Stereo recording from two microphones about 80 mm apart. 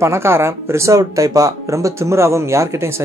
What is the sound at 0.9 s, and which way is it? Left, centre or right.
Speech, right.